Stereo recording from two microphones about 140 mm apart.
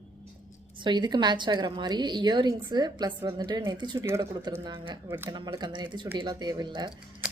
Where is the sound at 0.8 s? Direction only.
30° right (ahead or behind).